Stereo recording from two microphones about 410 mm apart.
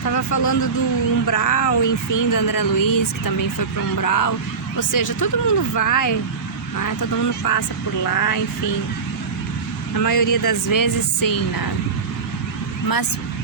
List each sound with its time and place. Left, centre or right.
0.0 s speech: left
10.0 s speech: left